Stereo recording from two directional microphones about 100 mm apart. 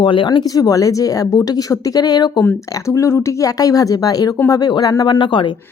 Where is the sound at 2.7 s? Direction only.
30° left (ahead or behind).